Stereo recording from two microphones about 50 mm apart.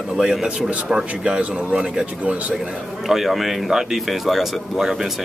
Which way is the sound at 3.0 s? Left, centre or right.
Centre.